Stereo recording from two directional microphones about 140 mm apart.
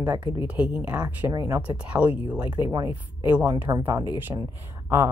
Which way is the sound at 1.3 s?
20° right (ahead or behind).